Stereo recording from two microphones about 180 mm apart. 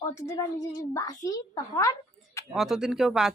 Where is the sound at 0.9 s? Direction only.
20° left (ahead or behind).